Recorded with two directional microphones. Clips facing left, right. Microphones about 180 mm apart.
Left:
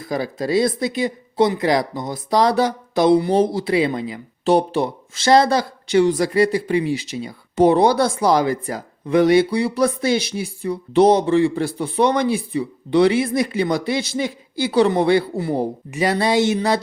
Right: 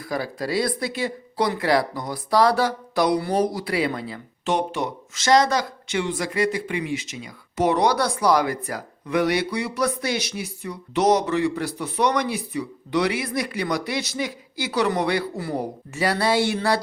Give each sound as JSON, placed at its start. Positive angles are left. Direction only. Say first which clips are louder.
{"t": 0.0, "sound": "speech", "louder": "left 4 dB", "side_deg": 20}
{"t": 4.4, "sound": "speech", "louder": "left 7 dB", "side_deg": 35}